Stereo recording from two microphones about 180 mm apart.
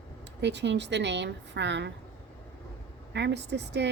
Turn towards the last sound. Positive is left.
turn(degrees=-70)  # may be behind; listen again after turning